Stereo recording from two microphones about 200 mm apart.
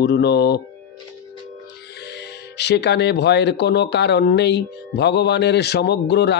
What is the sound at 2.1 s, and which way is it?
Music, 60° left (ahead or behind).